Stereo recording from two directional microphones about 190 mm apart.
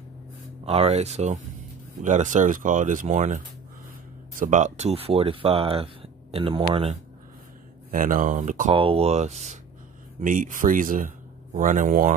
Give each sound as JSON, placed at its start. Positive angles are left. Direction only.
{"t": 0.7, "sound": "speech", "side_deg": -35}
{"t": 7.9, "sound": "speech", "side_deg": -45}